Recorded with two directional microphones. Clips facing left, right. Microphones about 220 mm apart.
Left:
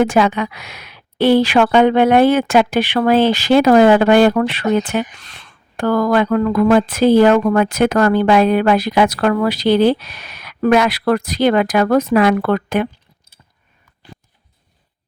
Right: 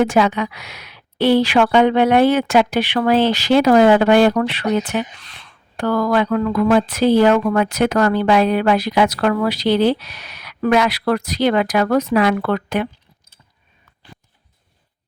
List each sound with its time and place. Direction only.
0.0 s speech: 50° left (ahead or behind)